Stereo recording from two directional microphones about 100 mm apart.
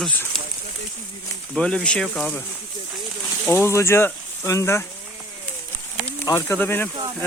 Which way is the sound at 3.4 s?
20° left (ahead or behind).